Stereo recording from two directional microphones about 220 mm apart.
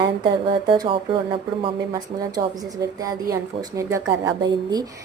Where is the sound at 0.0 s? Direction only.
20° right (ahead or behind).